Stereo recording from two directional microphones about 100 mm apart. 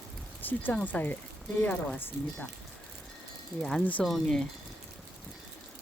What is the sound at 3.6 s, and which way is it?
Speech, 5° left (ahead or behind).